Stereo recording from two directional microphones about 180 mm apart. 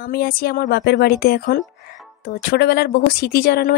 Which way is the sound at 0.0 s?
55° left (ahead or behind).